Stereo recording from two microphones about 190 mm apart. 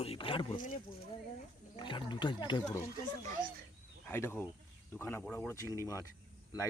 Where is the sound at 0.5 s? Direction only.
45° left (ahead or behind).